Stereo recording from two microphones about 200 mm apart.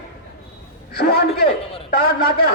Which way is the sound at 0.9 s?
50° left (ahead or behind).